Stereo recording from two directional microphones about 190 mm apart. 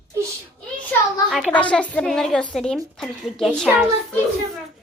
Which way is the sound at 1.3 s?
Centre (ahead or behind).